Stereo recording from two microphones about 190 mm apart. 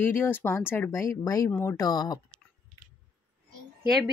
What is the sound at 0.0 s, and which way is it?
Speech, 10° left (ahead or behind).